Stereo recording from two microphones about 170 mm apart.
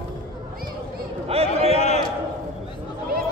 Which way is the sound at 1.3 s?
35° right (ahead or behind).